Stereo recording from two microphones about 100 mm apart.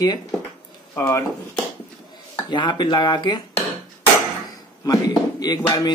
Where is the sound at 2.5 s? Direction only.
50° left (ahead or behind).